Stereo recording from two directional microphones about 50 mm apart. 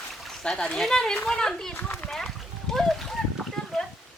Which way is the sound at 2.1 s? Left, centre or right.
Centre.